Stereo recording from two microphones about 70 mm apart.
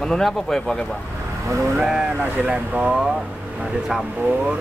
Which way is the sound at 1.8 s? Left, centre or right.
Centre.